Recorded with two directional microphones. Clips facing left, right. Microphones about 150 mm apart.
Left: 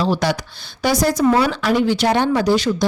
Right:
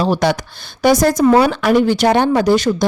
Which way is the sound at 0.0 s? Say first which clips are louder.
Right 3 dB; 55° right (ahead or behind).